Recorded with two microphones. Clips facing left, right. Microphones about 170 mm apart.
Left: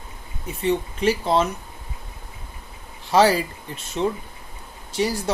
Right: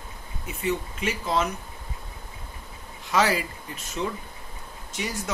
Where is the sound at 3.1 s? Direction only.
30° left (ahead or behind).